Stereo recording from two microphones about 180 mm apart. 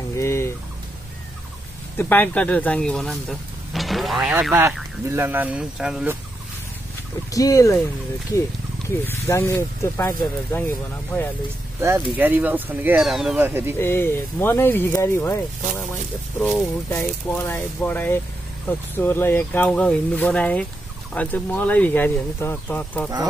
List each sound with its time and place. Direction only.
0.2 s fowl: 15° left (ahead or behind)
2.0 s speech: 10° left (ahead or behind)
7.2 s speech: 20° left (ahead or behind)
9.0 s speech: 10° left (ahead or behind)
11.8 s speech: 15° right (ahead or behind)
13.7 s speech: 15° left (ahead or behind)
16.3 s speech: 5° left (ahead or behind)